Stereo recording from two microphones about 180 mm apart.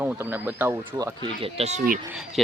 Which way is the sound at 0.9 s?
30° right (ahead or behind).